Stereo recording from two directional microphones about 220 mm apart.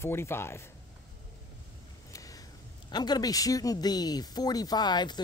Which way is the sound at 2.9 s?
20° left (ahead or behind).